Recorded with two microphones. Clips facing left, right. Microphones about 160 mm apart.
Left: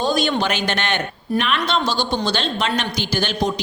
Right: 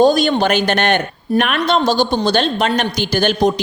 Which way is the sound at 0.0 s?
45° right (ahead or behind).